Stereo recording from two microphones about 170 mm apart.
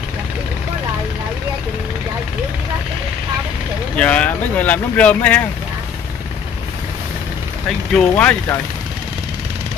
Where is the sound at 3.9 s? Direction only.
10° left (ahead or behind).